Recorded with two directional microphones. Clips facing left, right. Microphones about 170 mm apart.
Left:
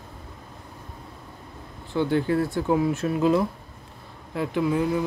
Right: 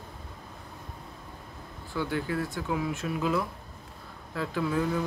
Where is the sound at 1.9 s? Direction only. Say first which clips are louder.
Left 8 dB; 30° left (ahead or behind).